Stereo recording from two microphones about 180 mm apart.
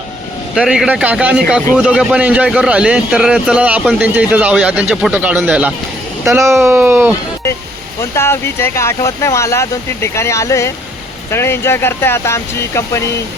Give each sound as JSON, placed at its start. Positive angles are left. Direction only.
{"t": 0.5, "sound": "a man's voice", "side_deg": -5}
{"t": 8.1, "sound": "speech", "side_deg": 15}